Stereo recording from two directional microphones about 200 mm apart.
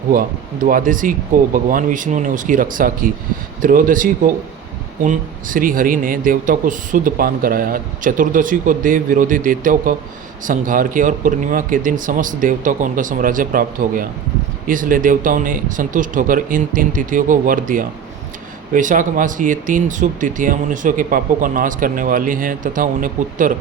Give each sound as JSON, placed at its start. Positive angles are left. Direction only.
{"t": 0.1, "sound": "speech", "side_deg": -45}